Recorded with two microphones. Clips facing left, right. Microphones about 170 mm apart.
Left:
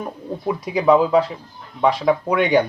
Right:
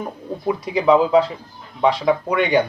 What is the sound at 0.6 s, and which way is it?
Speech, 10° left (ahead or behind).